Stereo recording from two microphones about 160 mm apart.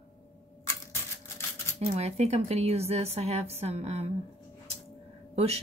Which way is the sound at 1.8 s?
40° right (ahead or behind).